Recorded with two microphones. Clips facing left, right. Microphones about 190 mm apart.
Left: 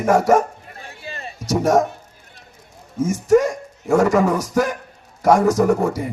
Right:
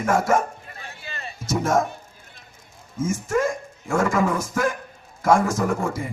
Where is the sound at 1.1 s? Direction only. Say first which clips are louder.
Left 4 dB; 35° left (ahead or behind).